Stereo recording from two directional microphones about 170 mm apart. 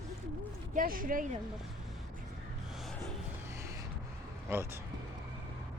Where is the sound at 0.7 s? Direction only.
55° right (ahead or behind).